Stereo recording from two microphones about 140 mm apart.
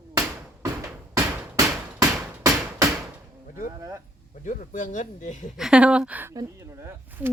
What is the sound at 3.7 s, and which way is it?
Speech, 20° right (ahead or behind).